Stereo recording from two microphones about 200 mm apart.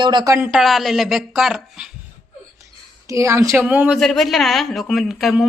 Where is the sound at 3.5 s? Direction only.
5° right (ahead or behind).